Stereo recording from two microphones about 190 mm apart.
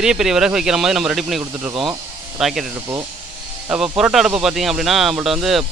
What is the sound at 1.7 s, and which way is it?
Speech, 25° right (ahead or behind).